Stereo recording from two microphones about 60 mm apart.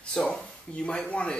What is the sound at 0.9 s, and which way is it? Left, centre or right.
Speech, centre.